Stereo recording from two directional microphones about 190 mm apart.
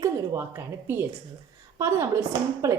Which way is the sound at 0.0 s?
15° right (ahead or behind).